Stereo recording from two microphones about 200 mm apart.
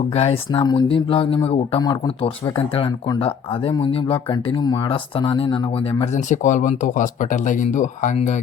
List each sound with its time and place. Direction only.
0.1 s speech: 30° left (ahead or behind)